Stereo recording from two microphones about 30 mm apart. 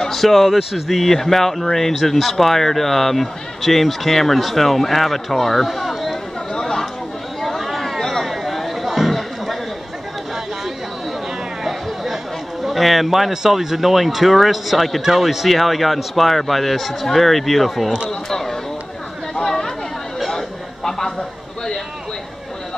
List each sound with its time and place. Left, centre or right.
0.1 s speech: centre
1.1 s speech: centre
6.6 s chatter: centre
11.6 s chatter: centre
12.6 s a man's voice: centre
18.3 s a sound: centre
19.4 s chatter: centre
20.2 s a sound: centre